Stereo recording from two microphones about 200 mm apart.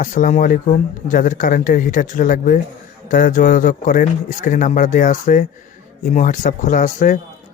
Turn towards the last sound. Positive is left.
turn(degrees=40)  # may be behind; listen again after turning